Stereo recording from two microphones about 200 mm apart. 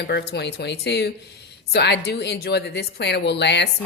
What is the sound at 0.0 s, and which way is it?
A woman's voice, 55° left (ahead or behind).